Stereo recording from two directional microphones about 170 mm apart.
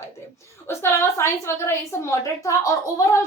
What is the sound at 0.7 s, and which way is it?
A woman's voice, 15° left (ahead or behind).